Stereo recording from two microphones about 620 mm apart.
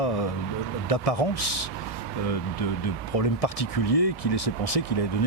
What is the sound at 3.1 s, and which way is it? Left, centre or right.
Speech, left.